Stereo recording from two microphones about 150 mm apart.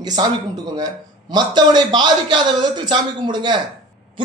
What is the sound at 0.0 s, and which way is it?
A woman's voice, 30° right (ahead or behind).